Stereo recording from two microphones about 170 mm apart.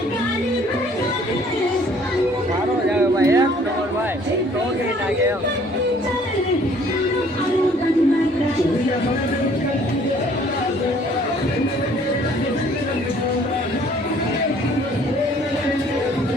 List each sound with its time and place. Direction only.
3.2 s music: 15° right (ahead or behind)